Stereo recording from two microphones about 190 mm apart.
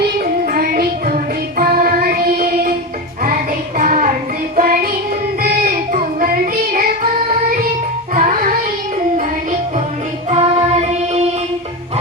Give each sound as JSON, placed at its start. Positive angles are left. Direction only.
{"t": 0.4, "sound": "music", "side_deg": -50}
{"t": 3.8, "sound": "music", "side_deg": -45}
{"t": 5.4, "sound": "child singing", "side_deg": -50}
{"t": 8.1, "sound": "music", "side_deg": -45}